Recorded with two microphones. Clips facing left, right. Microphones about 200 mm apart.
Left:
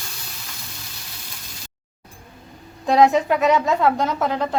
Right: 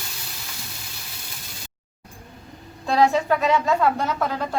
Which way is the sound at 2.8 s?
20° left (ahead or behind).